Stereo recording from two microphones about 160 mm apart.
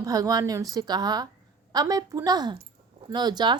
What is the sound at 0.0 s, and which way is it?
Speech, 25° right (ahead or behind).